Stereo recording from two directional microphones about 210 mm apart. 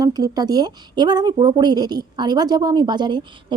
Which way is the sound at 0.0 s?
20° right (ahead or behind).